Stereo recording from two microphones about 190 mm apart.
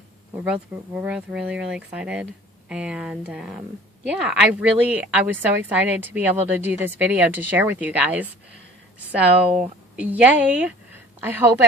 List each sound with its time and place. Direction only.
0.4 s a woman's voice: 5° right (ahead or behind)
9.6 s a woman's voice: 5° right (ahead or behind)